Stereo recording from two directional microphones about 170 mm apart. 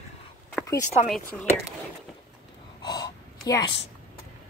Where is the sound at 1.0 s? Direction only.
Centre (ahead or behind).